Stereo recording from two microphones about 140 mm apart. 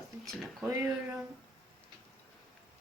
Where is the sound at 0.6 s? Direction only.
15° right (ahead or behind).